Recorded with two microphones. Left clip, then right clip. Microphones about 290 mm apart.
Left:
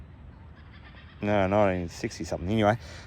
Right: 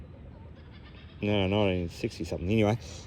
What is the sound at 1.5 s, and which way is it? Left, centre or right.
Speech, left.